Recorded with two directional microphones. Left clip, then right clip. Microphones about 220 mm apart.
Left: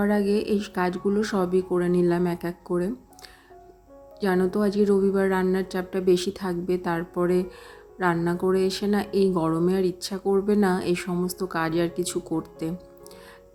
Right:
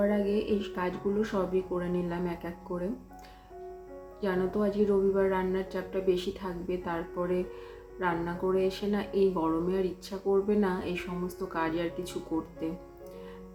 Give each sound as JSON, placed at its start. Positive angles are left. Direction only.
{"t": 0.0, "sound": "speech", "side_deg": 50}
{"t": 4.2, "sound": "speech", "side_deg": 50}